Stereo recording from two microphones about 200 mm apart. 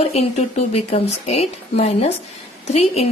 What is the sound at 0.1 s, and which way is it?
A woman's voice, 30° left (ahead or behind).